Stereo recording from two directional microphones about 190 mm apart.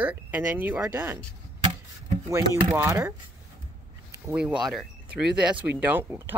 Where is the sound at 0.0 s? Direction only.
10° right (ahead or behind).